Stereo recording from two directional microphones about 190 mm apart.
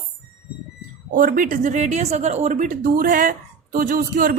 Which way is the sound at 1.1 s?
45° right (ahead or behind).